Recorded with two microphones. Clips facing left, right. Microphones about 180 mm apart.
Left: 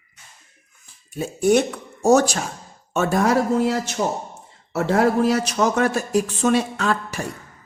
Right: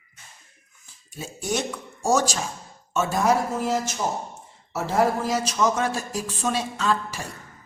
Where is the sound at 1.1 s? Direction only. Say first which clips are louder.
Left 11 dB; 60° left (ahead or behind).